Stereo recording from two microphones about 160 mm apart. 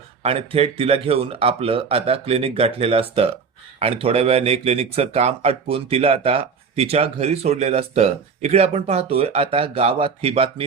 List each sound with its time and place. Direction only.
0.2 s speech: 40° right (ahead or behind)